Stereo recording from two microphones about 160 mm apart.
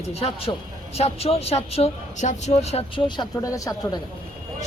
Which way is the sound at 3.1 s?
25° left (ahead or behind).